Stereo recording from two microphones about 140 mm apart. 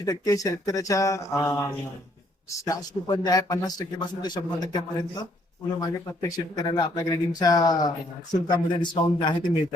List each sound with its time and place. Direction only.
0.0 s speech: 25° left (ahead or behind)
5.8 s speech: 25° left (ahead or behind)